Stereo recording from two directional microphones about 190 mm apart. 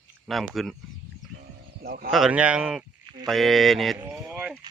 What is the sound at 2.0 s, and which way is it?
Speech, centre (ahead or behind).